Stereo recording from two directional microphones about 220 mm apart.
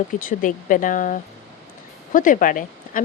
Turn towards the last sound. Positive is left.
turn(degrees=35)  # may be behind; listen again after turning